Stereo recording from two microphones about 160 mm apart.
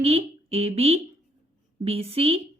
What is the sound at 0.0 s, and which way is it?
Speech, 40° right (ahead or behind).